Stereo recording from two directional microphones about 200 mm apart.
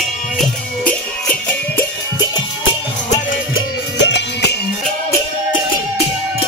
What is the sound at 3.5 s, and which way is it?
Music, 60° left (ahead or behind).